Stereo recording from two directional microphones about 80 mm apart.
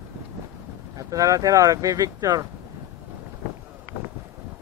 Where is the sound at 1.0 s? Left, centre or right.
Right.